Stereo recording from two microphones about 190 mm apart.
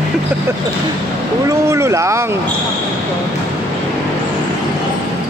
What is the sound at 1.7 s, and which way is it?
Speech, 15° right (ahead or behind).